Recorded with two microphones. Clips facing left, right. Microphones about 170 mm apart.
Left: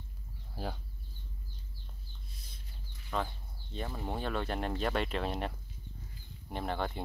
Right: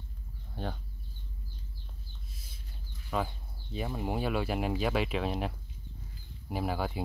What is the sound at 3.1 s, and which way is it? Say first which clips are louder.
Speech: right 3 dB; 5° right (ahead or behind).